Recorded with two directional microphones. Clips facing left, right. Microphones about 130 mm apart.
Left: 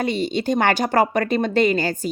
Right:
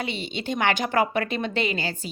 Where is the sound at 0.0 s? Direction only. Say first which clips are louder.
Left 8 dB; 40° left (ahead or behind).